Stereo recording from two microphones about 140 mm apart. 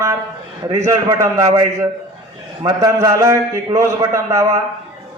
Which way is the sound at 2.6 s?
30° right (ahead or behind).